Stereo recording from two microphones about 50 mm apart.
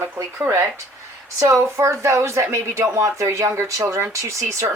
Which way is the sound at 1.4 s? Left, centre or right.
Right.